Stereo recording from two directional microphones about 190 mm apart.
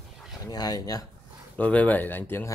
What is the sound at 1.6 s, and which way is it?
Speech, 5° left (ahead or behind).